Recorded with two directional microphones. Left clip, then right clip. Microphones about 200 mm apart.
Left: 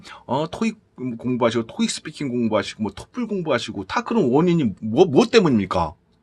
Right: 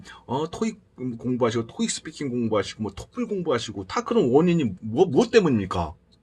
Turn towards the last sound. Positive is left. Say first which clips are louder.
# left 4 dB
turn(degrees=35)  # may be behind; listen again after turning